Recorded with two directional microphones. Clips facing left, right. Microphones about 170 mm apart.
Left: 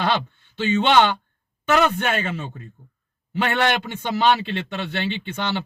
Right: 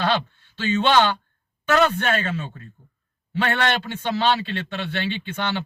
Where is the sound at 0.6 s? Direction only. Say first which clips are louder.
Left 1 dB; 20° left (ahead or behind).